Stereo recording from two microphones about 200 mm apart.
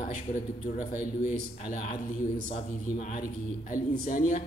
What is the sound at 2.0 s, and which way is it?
A man's voice, 40° left (ahead or behind).